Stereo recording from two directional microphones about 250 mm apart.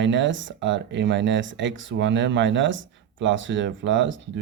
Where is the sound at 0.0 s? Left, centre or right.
Right.